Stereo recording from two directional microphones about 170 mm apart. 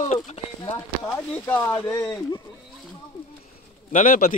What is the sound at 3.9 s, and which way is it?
Speech, 55° left (ahead or behind).